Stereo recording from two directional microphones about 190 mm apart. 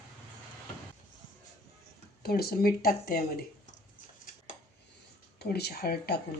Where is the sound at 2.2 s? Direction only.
55° left (ahead or behind).